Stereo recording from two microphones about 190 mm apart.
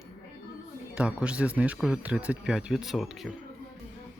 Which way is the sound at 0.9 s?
5° right (ahead or behind).